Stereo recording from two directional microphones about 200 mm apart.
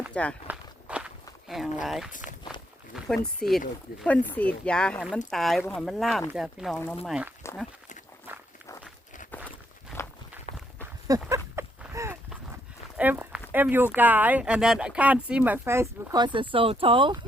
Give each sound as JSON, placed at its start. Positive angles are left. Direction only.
{"t": 0.1, "sound": "speech", "side_deg": 5}
{"t": 0.4, "sound": "walk", "side_deg": -5}
{"t": 2.0, "sound": "speech", "side_deg": 40}
{"t": 2.9, "sound": "a sound", "side_deg": 0}
{"t": 3.4, "sound": "speech", "side_deg": 0}
{"t": 9.9, "sound": "walk", "side_deg": 10}
{"t": 10.5, "sound": "walk", "side_deg": 35}
{"t": 11.3, "sound": "a sound", "side_deg": -15}
{"t": 13.0, "sound": "walk", "side_deg": -10}
{"t": 13.5, "sound": "speech", "side_deg": -10}